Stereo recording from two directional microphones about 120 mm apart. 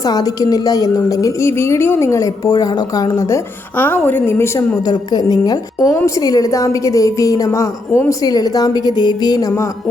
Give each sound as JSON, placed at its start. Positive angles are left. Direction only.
{"t": 0.0, "sound": "a woman's voice", "side_deg": 30}
{"t": 4.9, "sound": "a woman's voice", "side_deg": 35}